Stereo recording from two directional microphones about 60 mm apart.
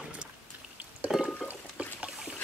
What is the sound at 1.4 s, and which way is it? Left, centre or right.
Water, right.